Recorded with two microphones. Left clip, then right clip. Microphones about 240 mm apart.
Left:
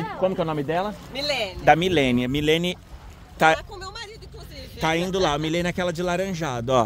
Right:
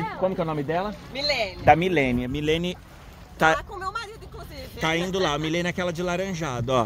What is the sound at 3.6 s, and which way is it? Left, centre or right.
Speech, right.